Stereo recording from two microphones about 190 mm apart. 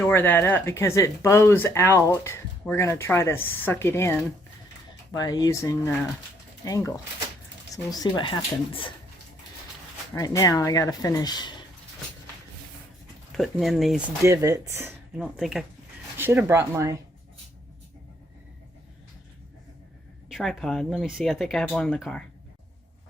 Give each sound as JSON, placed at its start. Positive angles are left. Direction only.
{"t": 0.0, "sound": "speech", "side_deg": 10}
{"t": 10.2, "sound": "speech", "side_deg": 20}
{"t": 13.3, "sound": "speech", "side_deg": 0}
{"t": 14.2, "sound": "speech", "side_deg": -15}
{"t": 20.3, "sound": "speech", "side_deg": 0}